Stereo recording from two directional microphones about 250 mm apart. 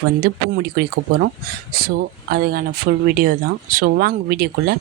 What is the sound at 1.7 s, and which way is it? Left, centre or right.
Speech, right.